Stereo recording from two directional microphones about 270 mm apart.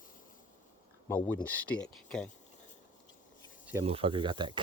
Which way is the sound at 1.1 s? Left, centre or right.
Centre.